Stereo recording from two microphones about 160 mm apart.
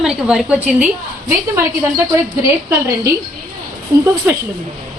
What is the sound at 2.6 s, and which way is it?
Speech, 20° right (ahead or behind).